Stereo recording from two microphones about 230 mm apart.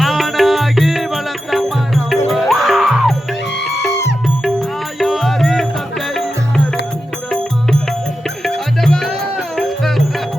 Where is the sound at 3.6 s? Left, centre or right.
Left.